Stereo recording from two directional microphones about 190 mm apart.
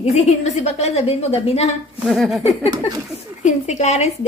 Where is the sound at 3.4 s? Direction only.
35° left (ahead or behind).